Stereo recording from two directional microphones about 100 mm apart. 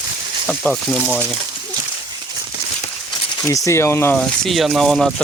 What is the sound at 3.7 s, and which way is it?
Speech, 25° left (ahead or behind).